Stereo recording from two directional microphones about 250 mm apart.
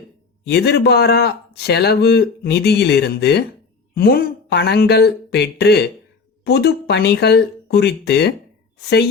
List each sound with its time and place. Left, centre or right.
0.4 s speech: left